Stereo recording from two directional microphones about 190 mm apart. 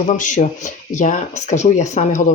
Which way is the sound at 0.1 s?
40° left (ahead or behind).